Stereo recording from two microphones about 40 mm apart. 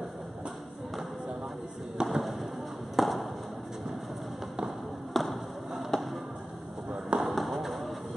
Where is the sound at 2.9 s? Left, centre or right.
Centre.